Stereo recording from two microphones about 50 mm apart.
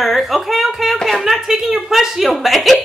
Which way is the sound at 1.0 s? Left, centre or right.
Centre.